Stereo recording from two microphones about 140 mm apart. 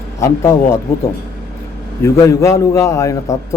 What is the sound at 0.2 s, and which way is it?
Speech, 20° left (ahead or behind).